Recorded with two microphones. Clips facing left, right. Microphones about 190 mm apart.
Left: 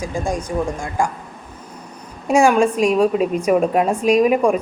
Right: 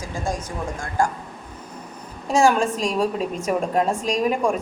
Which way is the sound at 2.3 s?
15° left (ahead or behind).